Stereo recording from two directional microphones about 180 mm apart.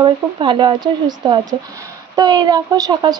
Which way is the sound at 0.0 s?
25° right (ahead or behind).